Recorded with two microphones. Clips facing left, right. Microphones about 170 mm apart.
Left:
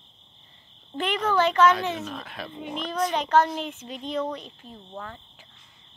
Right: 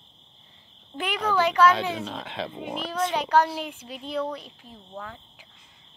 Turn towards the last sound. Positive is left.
turn(degrees=-5)  # may be behind; listen again after turning